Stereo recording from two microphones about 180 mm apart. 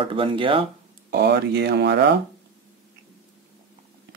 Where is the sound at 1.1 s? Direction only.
65° right (ahead or behind).